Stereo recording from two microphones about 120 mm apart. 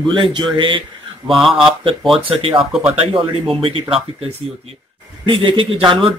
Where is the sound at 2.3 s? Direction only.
50° right (ahead or behind).